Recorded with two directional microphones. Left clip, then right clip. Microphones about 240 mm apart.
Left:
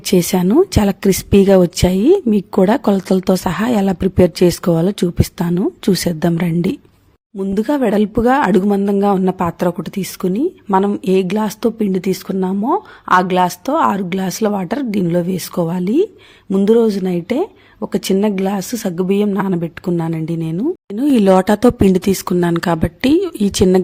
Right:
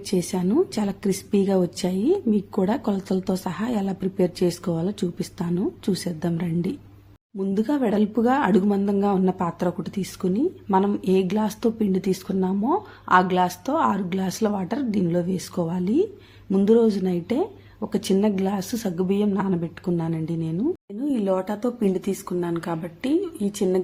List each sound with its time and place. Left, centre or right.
0.0 s speech: left